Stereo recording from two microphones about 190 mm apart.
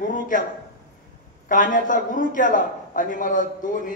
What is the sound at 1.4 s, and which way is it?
A man's voice, 45° left (ahead or behind).